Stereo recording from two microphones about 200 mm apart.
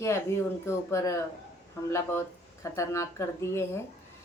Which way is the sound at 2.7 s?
15° left (ahead or behind).